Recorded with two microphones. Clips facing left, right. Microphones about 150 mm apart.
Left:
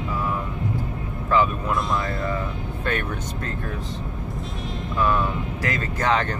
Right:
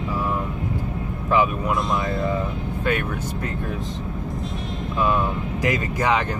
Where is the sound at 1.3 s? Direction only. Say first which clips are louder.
Right 1 dB; 20° right (ahead or behind).